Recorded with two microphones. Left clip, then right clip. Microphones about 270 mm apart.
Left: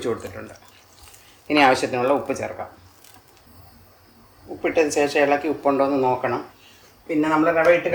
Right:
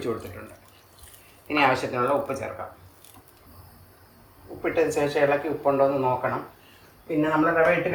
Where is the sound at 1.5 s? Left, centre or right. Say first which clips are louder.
Left 5 dB; left.